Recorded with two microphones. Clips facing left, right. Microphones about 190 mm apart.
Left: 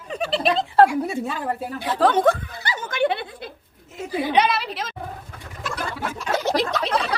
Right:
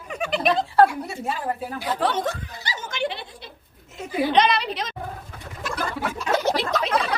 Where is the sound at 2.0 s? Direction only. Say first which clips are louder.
Left 9 dB; 50° left (ahead or behind).